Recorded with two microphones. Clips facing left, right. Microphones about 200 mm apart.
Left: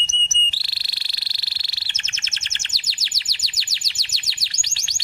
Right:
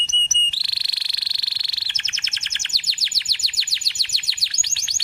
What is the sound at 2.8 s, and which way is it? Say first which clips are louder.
Chirp: even; 25° left (ahead or behind).